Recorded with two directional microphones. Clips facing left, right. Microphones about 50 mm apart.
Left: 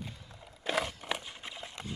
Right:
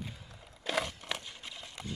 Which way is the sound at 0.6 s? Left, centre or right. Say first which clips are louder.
Left 1 dB; centre.